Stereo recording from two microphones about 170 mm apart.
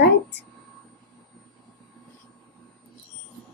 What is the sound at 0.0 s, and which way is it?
Speech, 85° left.